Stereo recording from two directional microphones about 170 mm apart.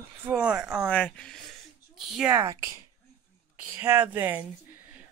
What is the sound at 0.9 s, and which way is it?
Speech, 5° left (ahead or behind).